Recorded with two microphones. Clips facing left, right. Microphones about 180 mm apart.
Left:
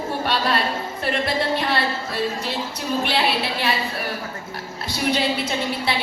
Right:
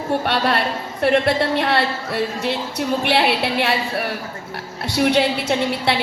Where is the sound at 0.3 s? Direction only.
60° right (ahead or behind).